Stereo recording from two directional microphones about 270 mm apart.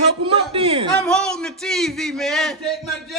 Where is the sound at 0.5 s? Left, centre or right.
Centre.